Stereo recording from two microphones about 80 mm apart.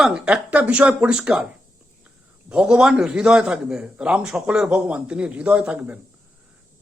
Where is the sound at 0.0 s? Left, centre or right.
Centre.